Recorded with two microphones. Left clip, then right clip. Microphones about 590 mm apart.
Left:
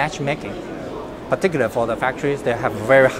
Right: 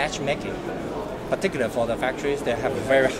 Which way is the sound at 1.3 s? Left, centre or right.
Left.